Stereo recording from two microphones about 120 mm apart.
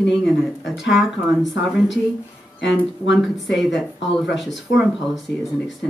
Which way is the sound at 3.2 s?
Centre (ahead or behind).